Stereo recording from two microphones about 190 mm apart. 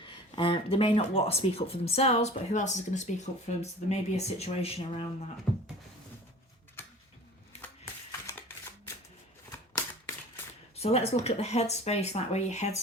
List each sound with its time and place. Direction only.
0.0 s speech: 25° left (ahead or behind)
9.5 s shuffling cards: 15° left (ahead or behind)
10.8 s speech: 35° left (ahead or behind)